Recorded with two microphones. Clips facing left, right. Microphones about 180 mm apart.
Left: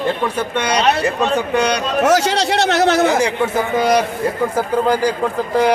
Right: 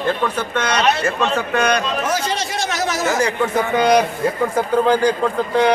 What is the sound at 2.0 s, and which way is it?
A man's voice, 80° left.